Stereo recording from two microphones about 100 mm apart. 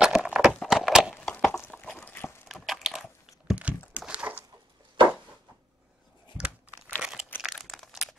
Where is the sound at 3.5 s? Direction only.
15° right (ahead or behind).